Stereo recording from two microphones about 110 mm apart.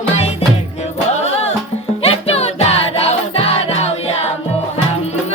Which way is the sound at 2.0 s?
70° left (ahead or behind).